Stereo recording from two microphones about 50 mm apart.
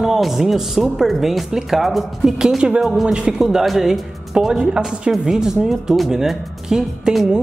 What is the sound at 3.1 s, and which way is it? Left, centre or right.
Speech, centre.